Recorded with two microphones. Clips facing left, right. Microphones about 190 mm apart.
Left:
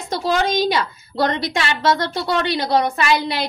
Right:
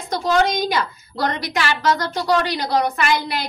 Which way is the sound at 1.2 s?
25° left (ahead or behind).